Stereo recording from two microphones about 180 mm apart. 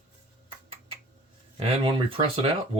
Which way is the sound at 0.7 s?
30° right (ahead or behind).